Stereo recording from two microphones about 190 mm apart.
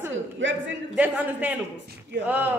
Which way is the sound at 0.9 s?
10° right (ahead or behind).